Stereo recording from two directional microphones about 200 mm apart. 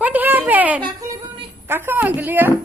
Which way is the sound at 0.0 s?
10° right (ahead or behind).